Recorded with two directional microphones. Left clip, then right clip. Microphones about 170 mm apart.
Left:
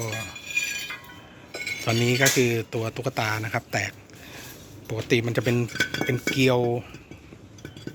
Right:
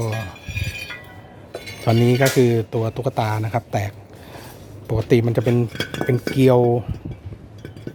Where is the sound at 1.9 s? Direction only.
20° right (ahead or behind).